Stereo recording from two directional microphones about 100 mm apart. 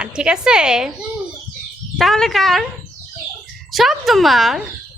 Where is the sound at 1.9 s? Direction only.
5° left (ahead or behind).